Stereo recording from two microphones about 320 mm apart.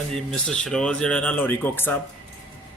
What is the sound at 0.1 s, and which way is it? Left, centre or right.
Speech, centre.